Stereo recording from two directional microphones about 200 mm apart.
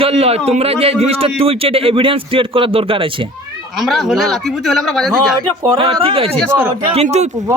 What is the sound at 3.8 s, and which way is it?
Speech, centre (ahead or behind).